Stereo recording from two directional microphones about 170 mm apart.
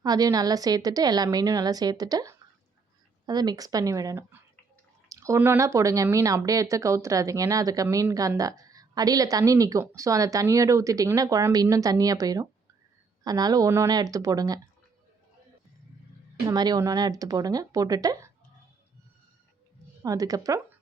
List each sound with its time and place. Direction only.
0.0 s speech: 20° right (ahead or behind)
16.5 s speech: 25° right (ahead or behind)
20.0 s speech: 20° right (ahead or behind)